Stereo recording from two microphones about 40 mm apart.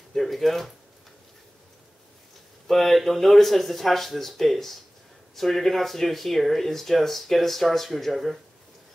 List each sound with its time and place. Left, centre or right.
0.1 s speech: centre
2.7 s speech: centre